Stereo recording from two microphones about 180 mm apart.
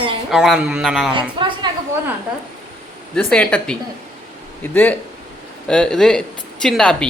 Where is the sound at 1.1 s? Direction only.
25° right (ahead or behind).